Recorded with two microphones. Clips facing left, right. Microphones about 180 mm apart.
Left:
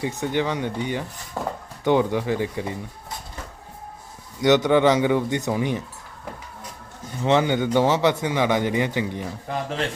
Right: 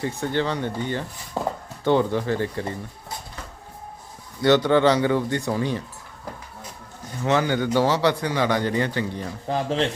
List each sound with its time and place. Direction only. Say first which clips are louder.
0.0 s speech: even; 15° left (ahead or behind)
1.4 s speech: right 2 dB; 15° right (ahead or behind)
1.8 s speech: even; 15° left (ahead or behind)
4.4 s speech: even; 15° left (ahead or behind)
7.3 s speech: left 2 dB; 20° left (ahead or behind)
9.5 s speech: right 5 dB; 30° right (ahead or behind)